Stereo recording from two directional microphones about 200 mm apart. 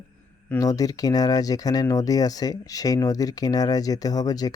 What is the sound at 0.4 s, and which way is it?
Speech, 15° left (ahead or behind).